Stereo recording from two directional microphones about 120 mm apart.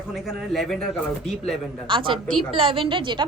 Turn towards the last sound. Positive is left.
turn(degrees=-45)  # may be behind; listen again after turning